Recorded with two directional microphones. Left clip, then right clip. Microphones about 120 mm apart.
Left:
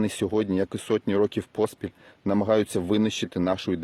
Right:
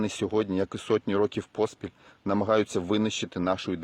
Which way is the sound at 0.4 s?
45° left (ahead or behind).